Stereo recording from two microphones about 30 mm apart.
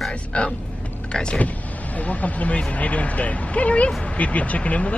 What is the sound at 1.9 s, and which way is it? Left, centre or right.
Speech, left.